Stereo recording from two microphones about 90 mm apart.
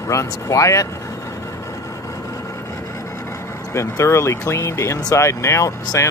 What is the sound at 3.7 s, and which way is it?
Speech, 35° left (ahead or behind).